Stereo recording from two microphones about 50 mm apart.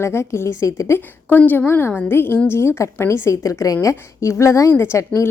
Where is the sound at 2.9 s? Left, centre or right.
Left.